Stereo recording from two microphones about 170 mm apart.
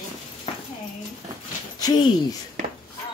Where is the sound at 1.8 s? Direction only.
25° left (ahead or behind).